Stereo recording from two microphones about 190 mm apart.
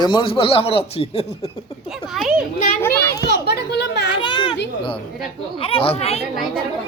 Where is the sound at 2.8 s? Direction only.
15° left (ahead or behind).